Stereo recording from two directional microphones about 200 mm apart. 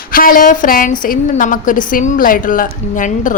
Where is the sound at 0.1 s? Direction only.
45° left (ahead or behind).